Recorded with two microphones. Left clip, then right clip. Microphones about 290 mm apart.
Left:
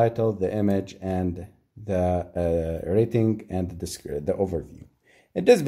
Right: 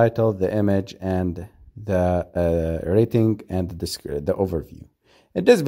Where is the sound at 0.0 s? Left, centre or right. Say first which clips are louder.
Right 3 dB; right.